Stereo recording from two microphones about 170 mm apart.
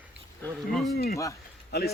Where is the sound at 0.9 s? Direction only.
60° left (ahead or behind).